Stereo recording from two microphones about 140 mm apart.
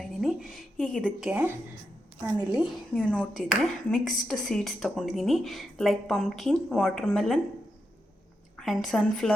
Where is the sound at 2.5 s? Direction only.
Centre (ahead or behind).